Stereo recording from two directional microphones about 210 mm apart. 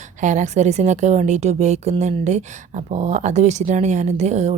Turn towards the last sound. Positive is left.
turn(degrees=-30)  # may be behind; listen again after turning